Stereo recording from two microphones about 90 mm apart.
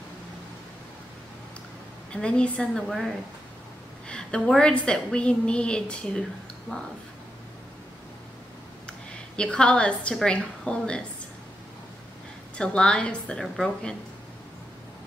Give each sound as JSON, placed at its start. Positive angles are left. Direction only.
{"t": 2.2, "sound": "a woman's voice", "side_deg": 10}
{"t": 9.4, "sound": "a woman's voice", "side_deg": 10}
{"t": 12.5, "sound": "a woman's voice", "side_deg": 10}